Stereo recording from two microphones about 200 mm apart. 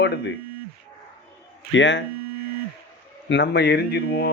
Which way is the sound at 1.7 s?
65° left (ahead or behind).